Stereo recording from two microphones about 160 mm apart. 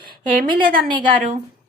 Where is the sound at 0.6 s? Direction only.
30° right (ahead or behind).